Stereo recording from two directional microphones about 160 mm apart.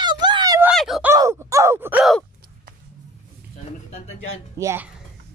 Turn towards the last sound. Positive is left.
turn(degrees=-15)  # may be behind; listen again after turning